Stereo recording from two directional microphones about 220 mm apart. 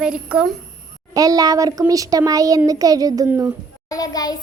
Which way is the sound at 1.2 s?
15° right (ahead or behind).